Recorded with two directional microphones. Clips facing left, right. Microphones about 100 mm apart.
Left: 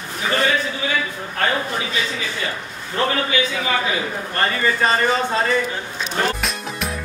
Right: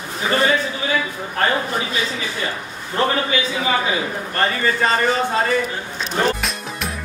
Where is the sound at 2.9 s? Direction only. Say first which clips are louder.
Right 1 dB; 30° right (ahead or behind).